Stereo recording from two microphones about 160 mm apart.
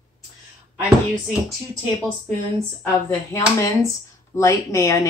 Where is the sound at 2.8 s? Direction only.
15° left (ahead or behind).